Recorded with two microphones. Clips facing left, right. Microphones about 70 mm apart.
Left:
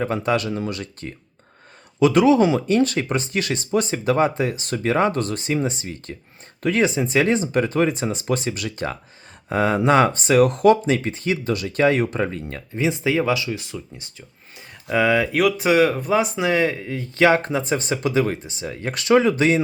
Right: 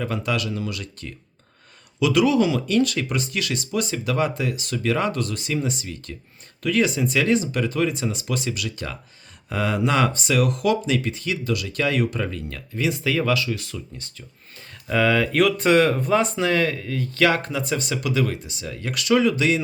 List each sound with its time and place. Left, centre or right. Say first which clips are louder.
0.0 s speech: left 4 dB; left